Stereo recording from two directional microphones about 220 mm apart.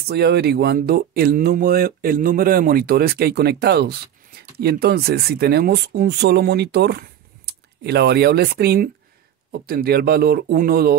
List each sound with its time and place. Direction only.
0.1 s speech: 50° right (ahead or behind)